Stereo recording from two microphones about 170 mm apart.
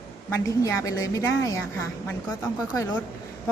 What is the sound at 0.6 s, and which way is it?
Speech, 20° left (ahead or behind).